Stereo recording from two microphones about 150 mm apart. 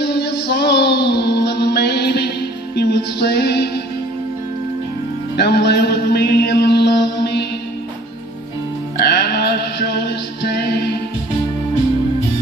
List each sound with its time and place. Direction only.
0.0 s music: 90° left
5.3 s mantra: 90° left
9.0 s music: 90° left